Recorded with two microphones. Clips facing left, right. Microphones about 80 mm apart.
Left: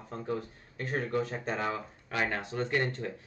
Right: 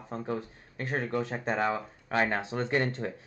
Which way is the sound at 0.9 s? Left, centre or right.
Right.